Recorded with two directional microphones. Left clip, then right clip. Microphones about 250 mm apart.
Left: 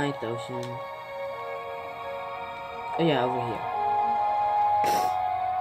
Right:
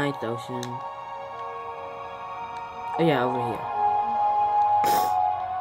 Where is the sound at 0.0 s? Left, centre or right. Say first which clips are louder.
Right 2 dB; centre.